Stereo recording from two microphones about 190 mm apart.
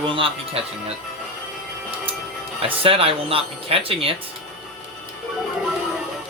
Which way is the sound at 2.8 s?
30° right (ahead or behind).